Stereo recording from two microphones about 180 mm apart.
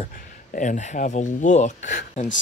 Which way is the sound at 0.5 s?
45° left (ahead or behind).